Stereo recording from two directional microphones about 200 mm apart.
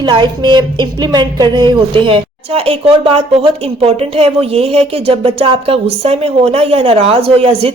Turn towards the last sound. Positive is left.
turn(degrees=-30)  # may be behind; listen again after turning